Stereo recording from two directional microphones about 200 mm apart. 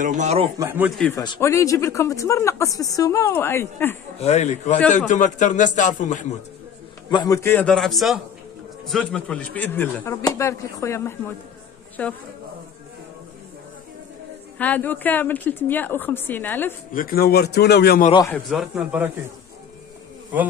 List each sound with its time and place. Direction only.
0.0 s speech: 40° right (ahead or behind)
0.6 s speech: 10° right (ahead or behind)
0.9 s speech: 5° left (ahead or behind)
1.2 s speech: 20° left (ahead or behind)
4.2 s a man's voice: 35° left (ahead or behind)
7.1 s speech: 20° left (ahead or behind)
14.6 s speech: 10° left (ahead or behind)
16.9 s a man's voice: 45° left (ahead or behind)
18.3 s speech: centre (ahead or behind)